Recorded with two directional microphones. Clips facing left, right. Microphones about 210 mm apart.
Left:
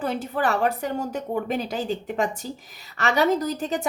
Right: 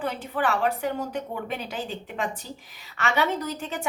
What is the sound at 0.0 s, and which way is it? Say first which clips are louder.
A woman's voice: left 2 dB; 40° left (ahead or behind).